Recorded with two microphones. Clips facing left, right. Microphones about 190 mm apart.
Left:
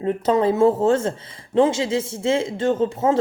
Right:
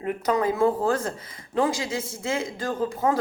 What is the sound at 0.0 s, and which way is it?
Speech, 25° left (ahead or behind).